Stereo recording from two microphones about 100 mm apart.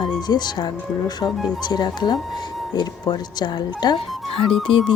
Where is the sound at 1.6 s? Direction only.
45° left (ahead or behind).